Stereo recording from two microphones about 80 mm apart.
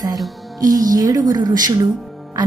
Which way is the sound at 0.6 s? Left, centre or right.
Right.